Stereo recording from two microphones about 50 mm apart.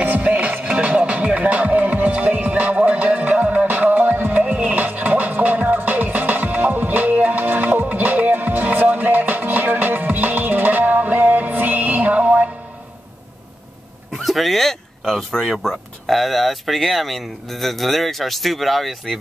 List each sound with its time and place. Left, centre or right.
0.0 s music: right
14.1 s a sound: centre
15.5 s speech: centre